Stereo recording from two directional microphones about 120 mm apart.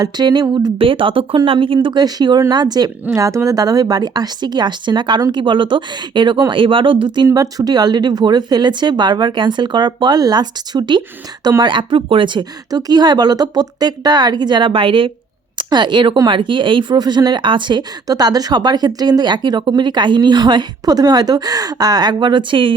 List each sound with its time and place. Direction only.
0.0 s speech: 35° right (ahead or behind)
0.8 s speech: 50° right (ahead or behind)
7.3 s speech: 30° right (ahead or behind)